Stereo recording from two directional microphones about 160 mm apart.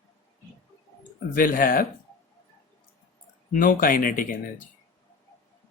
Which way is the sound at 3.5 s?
60° left (ahead or behind).